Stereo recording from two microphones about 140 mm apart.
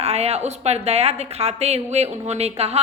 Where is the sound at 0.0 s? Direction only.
45° right (ahead or behind).